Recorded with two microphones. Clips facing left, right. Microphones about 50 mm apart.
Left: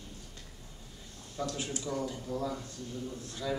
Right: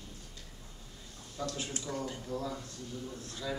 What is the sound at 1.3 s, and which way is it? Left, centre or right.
A man's voice, centre.